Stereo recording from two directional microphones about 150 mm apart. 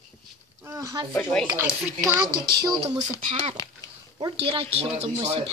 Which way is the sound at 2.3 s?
30° right (ahead or behind).